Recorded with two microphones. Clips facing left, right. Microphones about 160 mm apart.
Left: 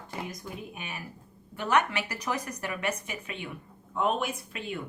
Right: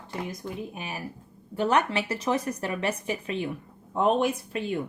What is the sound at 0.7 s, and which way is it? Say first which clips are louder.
Speech: right 5 dB; 35° right (ahead or behind).